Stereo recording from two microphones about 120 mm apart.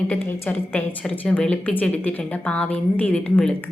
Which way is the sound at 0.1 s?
15° left (ahead or behind).